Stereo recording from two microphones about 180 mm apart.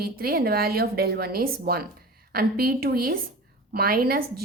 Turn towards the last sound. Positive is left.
turn(degrees=-55)  # may be behind; listen again after turning